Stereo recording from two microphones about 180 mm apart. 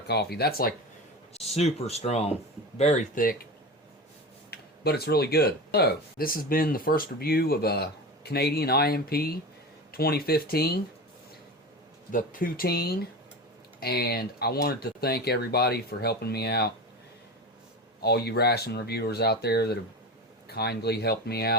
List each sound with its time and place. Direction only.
0.1 s speech: 60° left (ahead or behind)
1.3 s speech: 35° left (ahead or behind)
4.5 s speech: 60° left (ahead or behind)
12.1 s speech: 50° left (ahead or behind)
18.0 s speech: 60° left (ahead or behind)